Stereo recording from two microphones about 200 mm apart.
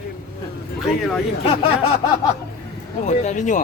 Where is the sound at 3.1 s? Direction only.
35° left (ahead or behind).